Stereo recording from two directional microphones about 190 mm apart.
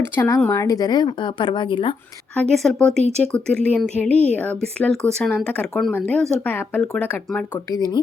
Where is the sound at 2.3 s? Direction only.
Centre (ahead or behind).